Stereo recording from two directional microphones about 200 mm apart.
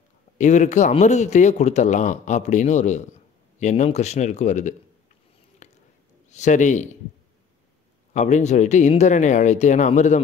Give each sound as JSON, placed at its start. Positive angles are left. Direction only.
{"t": 0.4, "sound": "speech", "side_deg": 35}
{"t": 5.6, "sound": "a sound", "side_deg": 35}
{"t": 6.3, "sound": "speech", "side_deg": 35}
{"t": 8.1, "sound": "speech", "side_deg": 35}